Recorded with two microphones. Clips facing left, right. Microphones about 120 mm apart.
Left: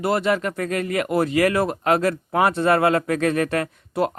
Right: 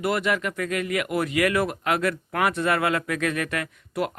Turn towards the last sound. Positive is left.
turn(degrees=35)  # may be behind; listen again after turning